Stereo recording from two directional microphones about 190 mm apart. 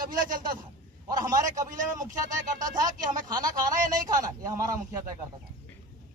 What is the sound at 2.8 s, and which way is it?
Speech, 20° right (ahead or behind).